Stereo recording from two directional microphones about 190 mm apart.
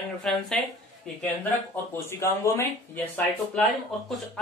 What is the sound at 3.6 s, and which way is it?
Speech, 5° left (ahead or behind).